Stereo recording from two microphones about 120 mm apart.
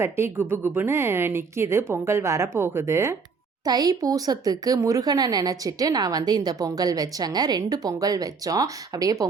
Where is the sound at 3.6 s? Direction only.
35° right (ahead or behind).